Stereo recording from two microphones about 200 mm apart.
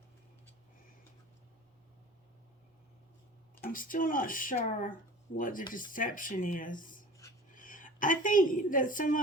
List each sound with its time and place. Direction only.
3.6 s a woman's voice: 45° left (ahead or behind)